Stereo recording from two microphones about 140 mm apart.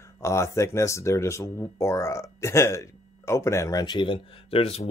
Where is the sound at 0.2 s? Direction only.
20° left (ahead or behind).